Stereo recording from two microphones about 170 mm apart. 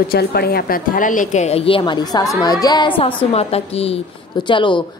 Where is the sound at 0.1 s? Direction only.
65° left (ahead or behind); by 2.9 s 25° left (ahead or behind).